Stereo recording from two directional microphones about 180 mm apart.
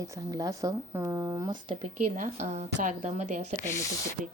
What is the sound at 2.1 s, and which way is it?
A woman's voice, 40° right (ahead or behind).